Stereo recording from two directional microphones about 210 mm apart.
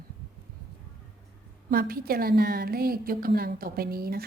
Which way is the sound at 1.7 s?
45° right (ahead or behind).